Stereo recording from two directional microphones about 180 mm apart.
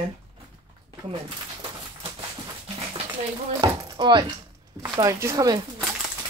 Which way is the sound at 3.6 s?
25° right (ahead or behind).